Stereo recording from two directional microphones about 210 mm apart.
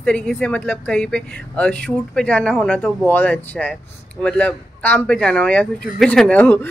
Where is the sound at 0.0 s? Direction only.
5° left (ahead or behind).